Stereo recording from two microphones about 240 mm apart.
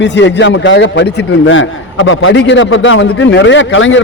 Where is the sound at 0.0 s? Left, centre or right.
Left.